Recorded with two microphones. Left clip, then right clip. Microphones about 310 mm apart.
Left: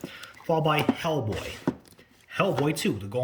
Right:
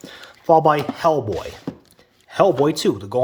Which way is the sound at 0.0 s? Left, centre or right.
Centre.